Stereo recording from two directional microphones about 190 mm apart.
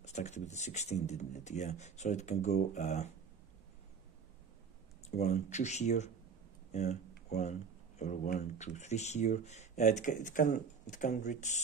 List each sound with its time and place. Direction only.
0.0 s speech: 35° left (ahead or behind)
5.1 s speech: 35° left (ahead or behind)